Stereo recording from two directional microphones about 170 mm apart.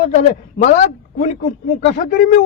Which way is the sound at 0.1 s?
45° left (ahead or behind).